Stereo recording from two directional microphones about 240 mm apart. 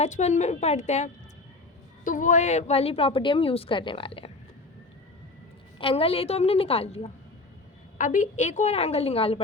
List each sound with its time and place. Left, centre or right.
0.0 s a woman's voice: left
5.8 s a woman's voice: left